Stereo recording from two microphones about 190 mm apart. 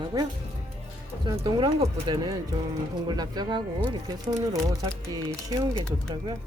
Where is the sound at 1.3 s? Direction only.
25° right (ahead or behind).